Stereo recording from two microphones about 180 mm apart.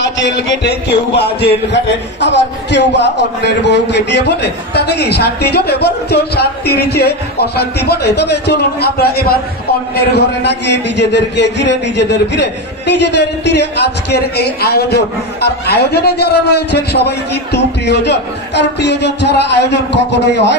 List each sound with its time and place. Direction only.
0.0 s a man's voice: 70° left (ahead or behind)